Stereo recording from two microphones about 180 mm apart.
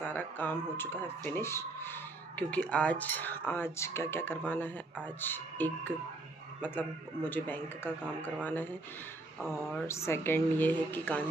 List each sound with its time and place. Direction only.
0.1 s speech: 10° left (ahead or behind)
9.4 s speech: centre (ahead or behind)
9.8 s speech: 15° left (ahead or behind)